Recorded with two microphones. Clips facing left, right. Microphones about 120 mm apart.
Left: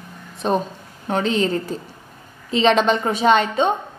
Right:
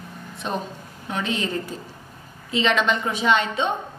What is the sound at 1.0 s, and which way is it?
A woman's voice, 35° left (ahead or behind).